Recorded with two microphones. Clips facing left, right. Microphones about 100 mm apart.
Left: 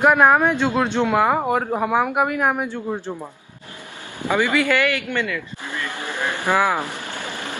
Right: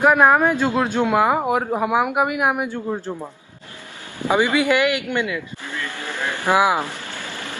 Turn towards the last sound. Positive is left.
turn(degrees=15)  # may be behind; listen again after turning